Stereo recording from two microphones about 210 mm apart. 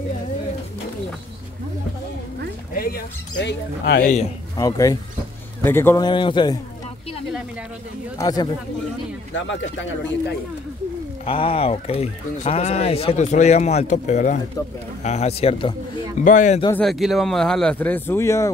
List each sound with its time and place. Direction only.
2.7 s music: 45° left (ahead or behind)
3.4 s speech: 55° left (ahead or behind)
4.6 s a man's voice: 15° left (ahead or behind)
8.2 s a man's voice: 15° left (ahead or behind)
9.3 s speech: 65° left (ahead or behind)
11.2 s speech: 25° left (ahead or behind)
16.7 s speech: centre (ahead or behind)